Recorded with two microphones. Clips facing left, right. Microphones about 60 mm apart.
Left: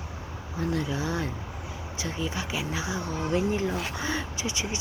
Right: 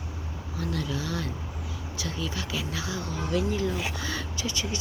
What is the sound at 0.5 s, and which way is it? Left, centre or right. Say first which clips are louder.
Speech: left 3 dB; left.